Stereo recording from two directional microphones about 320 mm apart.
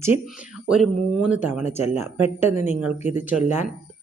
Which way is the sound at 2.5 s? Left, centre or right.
Left.